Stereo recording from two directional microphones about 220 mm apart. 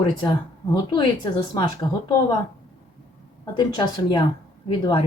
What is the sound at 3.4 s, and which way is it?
Speech, 20° left (ahead or behind).